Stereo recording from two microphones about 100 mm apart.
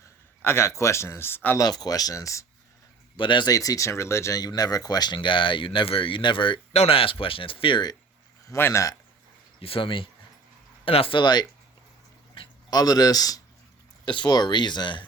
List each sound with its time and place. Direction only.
0.4 s speech: 25° left (ahead or behind)
1.5 s speech: 40° left (ahead or behind)
3.2 s speech: 50° left (ahead or behind)
3.5 s speech: 35° left (ahead or behind)
4.4 s speech: 40° left (ahead or behind)
8.4 s speech: 25° left (ahead or behind)
9.6 s speech: 65° left (ahead or behind)
11.2 s speech: 45° left (ahead or behind)
14.0 s speech: 50° left (ahead or behind)